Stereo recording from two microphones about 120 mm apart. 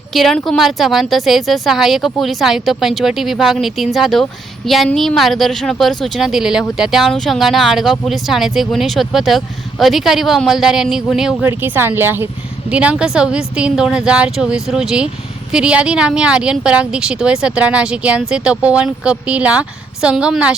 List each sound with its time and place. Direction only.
0.1 s speech: centre (ahead or behind)
11.4 s speech: 15° right (ahead or behind)